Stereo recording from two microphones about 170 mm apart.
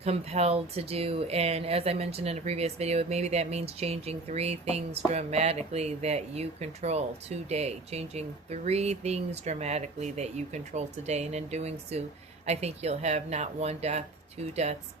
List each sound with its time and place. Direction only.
0.0 s speech: 40° right (ahead or behind)